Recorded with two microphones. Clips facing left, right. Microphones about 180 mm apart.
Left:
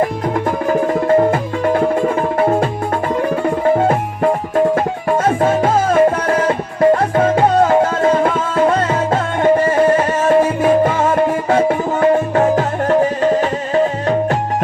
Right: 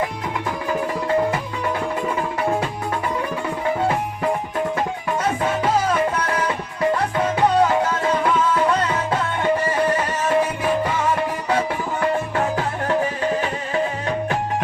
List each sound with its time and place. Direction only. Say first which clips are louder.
0.7 s music: left 8 dB; 50° left (ahead or behind)